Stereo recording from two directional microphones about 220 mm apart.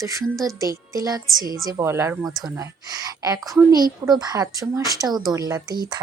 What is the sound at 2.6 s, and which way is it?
Speech, 15° right (ahead or behind).